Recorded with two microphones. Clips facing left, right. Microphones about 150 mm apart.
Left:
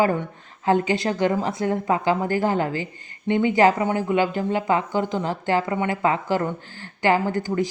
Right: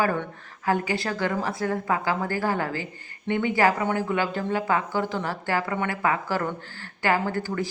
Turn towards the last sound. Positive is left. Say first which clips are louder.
# left 4 dB
turn(degrees=15)  # may be behind; listen again after turning